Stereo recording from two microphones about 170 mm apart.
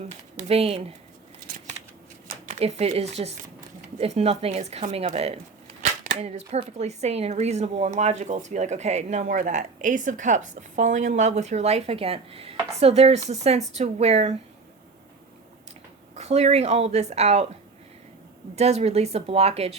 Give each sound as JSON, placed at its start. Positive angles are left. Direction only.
{"t": 0.1, "sound": "speech", "side_deg": -40}
{"t": 2.6, "sound": "speech", "side_deg": -40}
{"t": 16.1, "sound": "speech", "side_deg": -40}
{"t": 18.5, "sound": "speech", "side_deg": -40}